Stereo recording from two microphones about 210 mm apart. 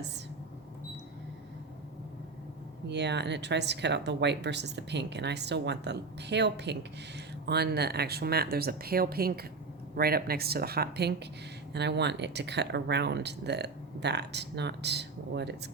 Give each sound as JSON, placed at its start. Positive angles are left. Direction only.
{"t": 2.9, "sound": "speech", "side_deg": -55}